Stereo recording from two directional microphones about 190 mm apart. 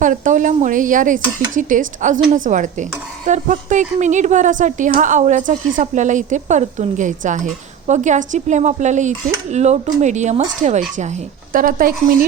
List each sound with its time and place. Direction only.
0.0 s a woman's voice: 40° right (ahead or behind)